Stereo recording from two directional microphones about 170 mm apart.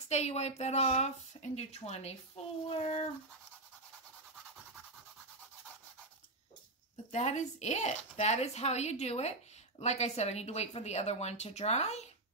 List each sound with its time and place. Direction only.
0.1 s speech: 40° left (ahead or behind)
7.1 s speech: 40° left (ahead or behind)